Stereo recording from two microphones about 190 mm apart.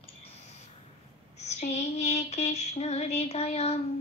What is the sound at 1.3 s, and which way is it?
Female singing, 35° left (ahead or behind).